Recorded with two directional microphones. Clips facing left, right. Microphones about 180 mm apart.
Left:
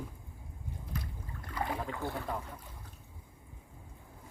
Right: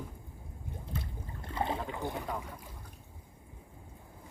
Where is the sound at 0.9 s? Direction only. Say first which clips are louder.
Right 1 dB; 25° right (ahead or behind).